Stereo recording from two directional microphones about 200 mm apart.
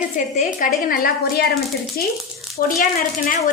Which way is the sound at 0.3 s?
45° left (ahead or behind).